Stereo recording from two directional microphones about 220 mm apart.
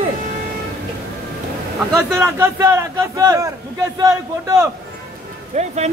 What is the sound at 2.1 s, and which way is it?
A man's voice, 10° right (ahead or behind).